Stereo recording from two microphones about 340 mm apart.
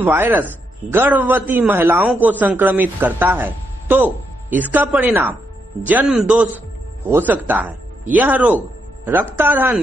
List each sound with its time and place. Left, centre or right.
0.0 s a man's voice: centre